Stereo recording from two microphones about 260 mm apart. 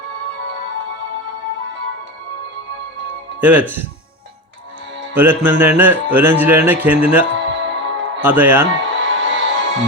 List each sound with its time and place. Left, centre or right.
3.4 s speech: centre
5.1 s speech: centre
7.3 s music: right
8.2 s speech: centre
8.8 s music: right